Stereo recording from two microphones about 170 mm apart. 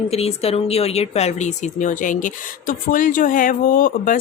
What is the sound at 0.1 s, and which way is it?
A woman's voice, 35° left (ahead or behind).